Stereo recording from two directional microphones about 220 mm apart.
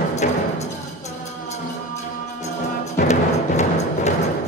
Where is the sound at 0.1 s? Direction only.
30° left (ahead or behind).